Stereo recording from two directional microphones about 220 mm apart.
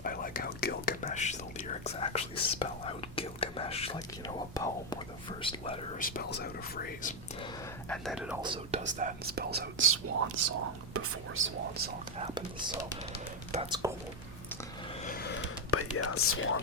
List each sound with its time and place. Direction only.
0.0 s whispering: 40° left (ahead or behind); by 5.8 s 25° left (ahead or behind)
6.0 s speech: 40° left (ahead or behind)
7.9 s speech: centre (ahead or behind)
8.4 s speech: 25° right (ahead or behind); by 9.8 s 45° right (ahead or behind)
9.9 s speech: 85° right
12.1 s speech: 25° right (ahead or behind)
15.0 s gasp: 45° left (ahead or behind)
15.7 s speech: 85° left; by 16.6 s 70° left (ahead or behind)